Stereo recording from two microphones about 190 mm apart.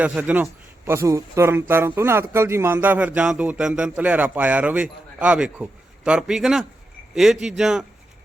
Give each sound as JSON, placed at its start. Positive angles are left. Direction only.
{"t": 0.0, "sound": "a man's voice", "side_deg": -10}